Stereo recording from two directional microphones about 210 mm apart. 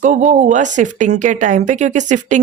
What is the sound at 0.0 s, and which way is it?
Speech, 35° right (ahead or behind).